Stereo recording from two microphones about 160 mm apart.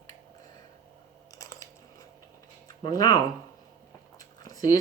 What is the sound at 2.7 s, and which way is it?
Speech, 25° left (ahead or behind).